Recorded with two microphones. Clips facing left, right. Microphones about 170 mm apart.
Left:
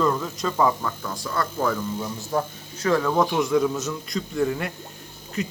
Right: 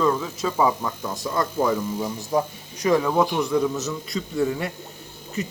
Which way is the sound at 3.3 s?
Centre (ahead or behind).